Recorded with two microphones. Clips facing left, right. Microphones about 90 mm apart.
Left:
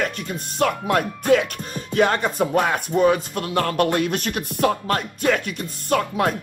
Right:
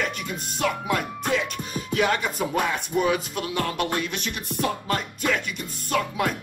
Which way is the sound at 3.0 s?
40° left (ahead or behind).